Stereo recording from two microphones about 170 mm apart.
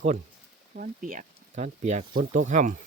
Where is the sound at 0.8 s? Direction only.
55° right (ahead or behind).